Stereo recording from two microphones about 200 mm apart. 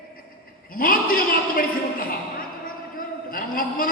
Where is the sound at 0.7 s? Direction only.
45° left (ahead or behind).